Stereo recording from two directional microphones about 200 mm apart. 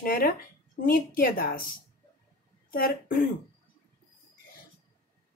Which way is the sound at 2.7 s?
45° left (ahead or behind).